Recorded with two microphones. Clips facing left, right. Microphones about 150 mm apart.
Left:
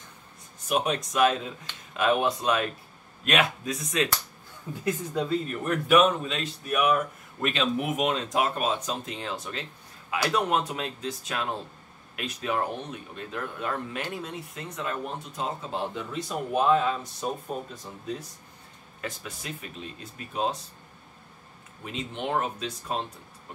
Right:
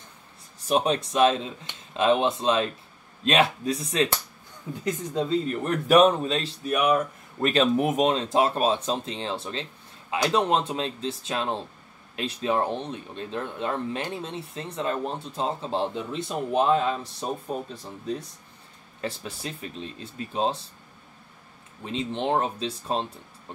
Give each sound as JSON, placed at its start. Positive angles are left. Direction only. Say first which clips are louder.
{"t": 0.6, "sound": "speech", "louder": "right 3 dB", "side_deg": -30}
{"t": 5.5, "sound": "speech", "louder": "right 2 dB", "side_deg": -35}
{"t": 18.9, "sound": "speech", "louder": "right 4 dB", "side_deg": -30}
{"t": 21.8, "sound": "speech", "louder": "right 5 dB", "side_deg": -30}